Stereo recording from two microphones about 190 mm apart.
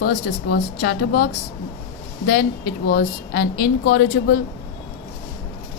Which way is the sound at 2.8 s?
60° left (ahead or behind).